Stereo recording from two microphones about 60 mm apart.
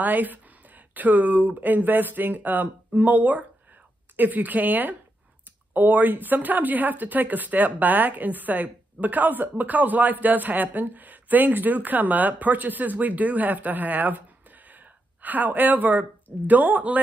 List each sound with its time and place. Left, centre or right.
0.0 s a woman's voice: right
15.2 s a woman's voice: right